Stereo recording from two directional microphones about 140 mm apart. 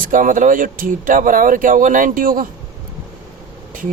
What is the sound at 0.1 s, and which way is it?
Speech, 70° right (ahead or behind).